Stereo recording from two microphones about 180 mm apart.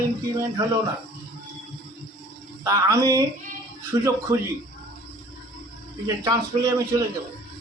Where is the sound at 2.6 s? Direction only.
20° right (ahead or behind).